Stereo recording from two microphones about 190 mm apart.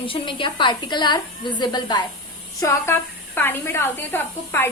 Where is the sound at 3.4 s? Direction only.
10° left (ahead or behind).